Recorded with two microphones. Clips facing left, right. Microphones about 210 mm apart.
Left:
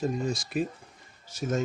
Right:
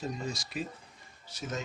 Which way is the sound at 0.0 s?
50° left (ahead or behind).